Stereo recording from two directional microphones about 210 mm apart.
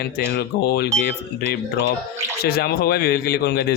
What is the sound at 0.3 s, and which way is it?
Speech, 50° left (ahead or behind).